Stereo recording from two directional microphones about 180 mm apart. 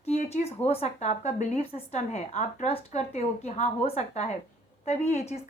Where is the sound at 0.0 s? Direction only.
35° left (ahead or behind).